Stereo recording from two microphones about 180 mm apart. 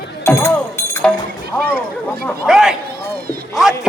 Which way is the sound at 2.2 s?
Centre (ahead or behind).